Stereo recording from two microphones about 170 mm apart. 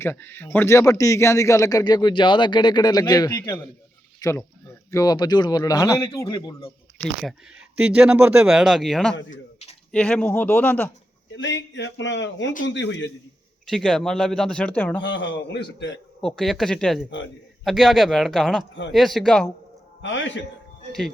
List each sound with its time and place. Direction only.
0.0 s a man's voice: 15° left (ahead or behind)
7.0 s speech: centre (ahead or behind)
9.3 s a sound: 40° left (ahead or behind)
9.9 s speech: 5° left (ahead or behind)
11.3 s speech: 90° left
13.7 s speech: centre (ahead or behind)
15.0 s speech: 90° left
16.2 s speech: centre (ahead or behind)
20.0 s speech: 90° left